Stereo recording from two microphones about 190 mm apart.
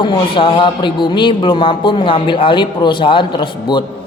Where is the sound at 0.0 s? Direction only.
25° left (ahead or behind).